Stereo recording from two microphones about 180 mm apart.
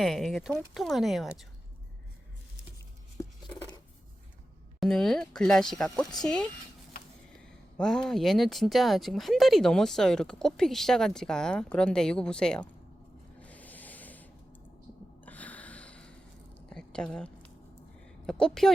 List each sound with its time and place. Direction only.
0.0 s speech: centre (ahead or behind)
3.2 s scissors: 15° left (ahead or behind)
4.8 s speech: centre (ahead or behind)
13.4 s a sound: 10° left (ahead or behind)
15.2 s gasp: 10° left (ahead or behind)
16.6 s a sound: 5° left (ahead or behind)
18.3 s speech: 5° left (ahead or behind)